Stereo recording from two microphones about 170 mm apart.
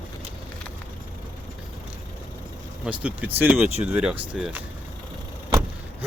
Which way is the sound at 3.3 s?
10° right (ahead or behind).